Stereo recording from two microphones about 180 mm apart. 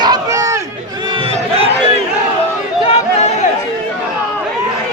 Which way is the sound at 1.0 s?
25° right (ahead or behind).